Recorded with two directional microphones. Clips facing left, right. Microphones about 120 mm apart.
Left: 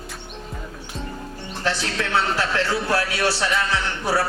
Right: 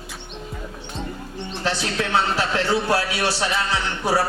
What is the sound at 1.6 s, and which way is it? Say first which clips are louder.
A man's voice: even; 15° right (ahead or behind).